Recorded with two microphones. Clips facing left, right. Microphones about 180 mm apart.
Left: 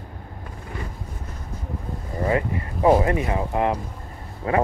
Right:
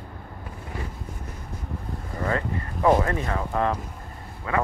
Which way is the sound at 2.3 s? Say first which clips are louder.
Left 4 dB; 15° left (ahead or behind).